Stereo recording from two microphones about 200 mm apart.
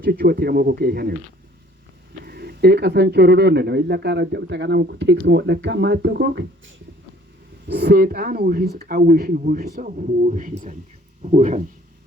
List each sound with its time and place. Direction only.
0.0 s speech: 50° right (ahead or behind)
2.2 s speech: 50° right (ahead or behind)
7.7 s speech: 55° right (ahead or behind); by 11.6 s 35° right (ahead or behind)